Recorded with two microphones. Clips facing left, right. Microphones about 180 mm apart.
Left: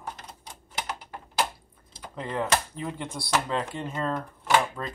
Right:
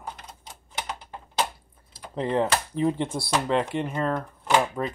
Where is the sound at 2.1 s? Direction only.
30° right (ahead or behind).